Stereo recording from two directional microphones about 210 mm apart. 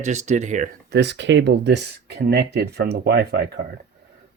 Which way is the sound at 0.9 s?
55° right (ahead or behind).